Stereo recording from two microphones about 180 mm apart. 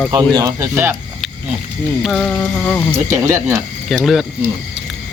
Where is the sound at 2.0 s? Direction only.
5° left (ahead or behind).